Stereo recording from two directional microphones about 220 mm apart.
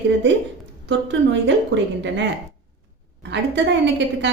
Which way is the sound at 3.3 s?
55° right (ahead or behind).